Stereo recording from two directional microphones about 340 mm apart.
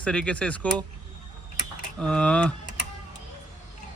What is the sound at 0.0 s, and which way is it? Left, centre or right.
Speech, centre.